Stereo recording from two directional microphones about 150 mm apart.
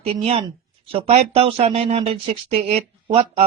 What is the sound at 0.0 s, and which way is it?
Speech, 40° right (ahead or behind).